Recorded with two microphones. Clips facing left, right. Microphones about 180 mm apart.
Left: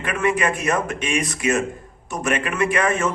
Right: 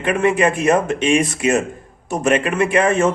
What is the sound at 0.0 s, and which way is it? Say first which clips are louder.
A man's voice: right 5 dB; 30° right (ahead or behind).